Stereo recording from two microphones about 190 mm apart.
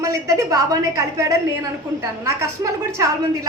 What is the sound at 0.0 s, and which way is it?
A woman's voice, 15° right (ahead or behind).